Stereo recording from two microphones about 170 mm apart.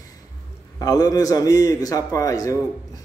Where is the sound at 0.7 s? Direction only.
20° left (ahead or behind).